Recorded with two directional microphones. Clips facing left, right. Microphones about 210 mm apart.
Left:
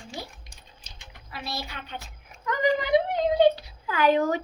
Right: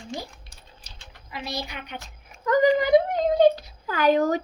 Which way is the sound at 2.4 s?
40° right (ahead or behind).